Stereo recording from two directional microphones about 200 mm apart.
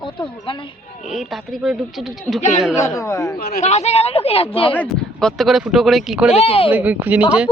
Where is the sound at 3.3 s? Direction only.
50° left (ahead or behind).